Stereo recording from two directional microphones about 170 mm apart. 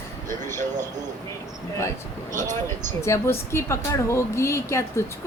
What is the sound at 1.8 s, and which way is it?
A woman's voice, 15° left (ahead or behind).